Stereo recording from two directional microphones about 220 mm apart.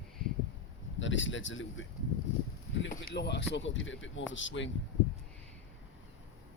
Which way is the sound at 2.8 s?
50° left (ahead or behind).